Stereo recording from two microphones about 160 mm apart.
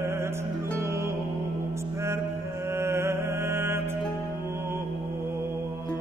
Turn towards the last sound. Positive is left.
turn(degrees=-15)  # may be behind; listen again after turning